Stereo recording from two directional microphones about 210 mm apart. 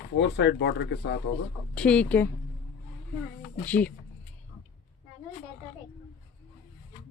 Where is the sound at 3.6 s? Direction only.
5° left (ahead or behind).